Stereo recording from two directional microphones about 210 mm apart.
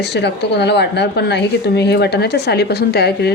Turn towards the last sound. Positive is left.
turn(degrees=50)  # may be behind; listen again after turning